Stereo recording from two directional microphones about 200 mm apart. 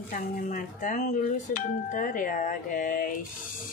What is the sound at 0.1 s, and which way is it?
Speech, 35° left (ahead or behind).